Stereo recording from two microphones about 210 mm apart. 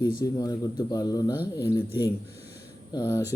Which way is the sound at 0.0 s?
20° left (ahead or behind).